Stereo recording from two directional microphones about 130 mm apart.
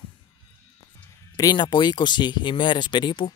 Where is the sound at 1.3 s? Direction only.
30° left (ahead or behind).